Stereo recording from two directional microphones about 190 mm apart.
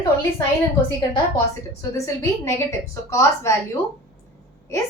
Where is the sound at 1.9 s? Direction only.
15° left (ahead or behind).